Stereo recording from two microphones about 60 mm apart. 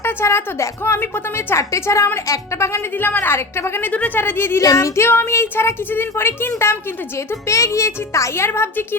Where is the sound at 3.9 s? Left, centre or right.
Left.